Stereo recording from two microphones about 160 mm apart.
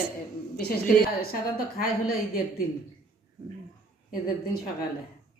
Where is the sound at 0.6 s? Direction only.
65° left (ahead or behind).